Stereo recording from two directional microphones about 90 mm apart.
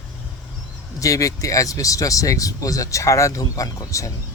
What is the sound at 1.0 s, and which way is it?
Speech, 40° left (ahead or behind).